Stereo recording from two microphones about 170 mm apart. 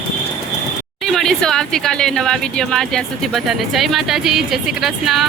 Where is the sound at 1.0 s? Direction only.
Centre (ahead or behind).